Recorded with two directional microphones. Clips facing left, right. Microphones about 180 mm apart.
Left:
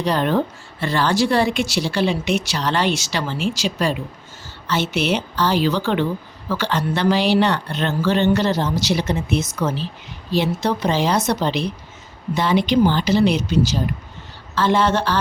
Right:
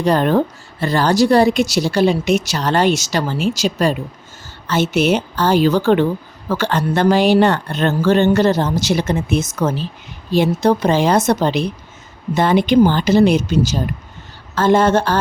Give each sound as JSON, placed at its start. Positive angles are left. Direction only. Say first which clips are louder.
{"t": 0.0, "sound": "a woman's voice", "louder": "right 4 dB", "side_deg": -45}